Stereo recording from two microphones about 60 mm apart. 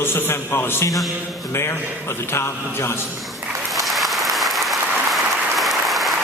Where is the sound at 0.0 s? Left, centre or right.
Left.